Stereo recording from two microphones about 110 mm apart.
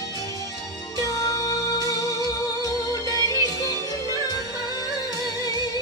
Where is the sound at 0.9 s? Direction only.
30° left (ahead or behind).